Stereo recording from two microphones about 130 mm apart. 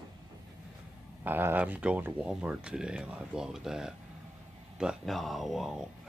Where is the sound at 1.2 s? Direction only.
15° right (ahead or behind).